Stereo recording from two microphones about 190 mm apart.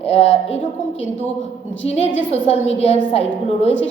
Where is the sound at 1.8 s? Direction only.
35° left (ahead or behind).